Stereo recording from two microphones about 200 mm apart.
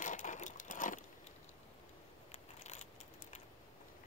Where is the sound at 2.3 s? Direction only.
35° left (ahead or behind).